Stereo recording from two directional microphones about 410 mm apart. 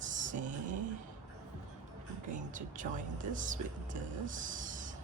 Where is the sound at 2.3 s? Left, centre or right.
Centre.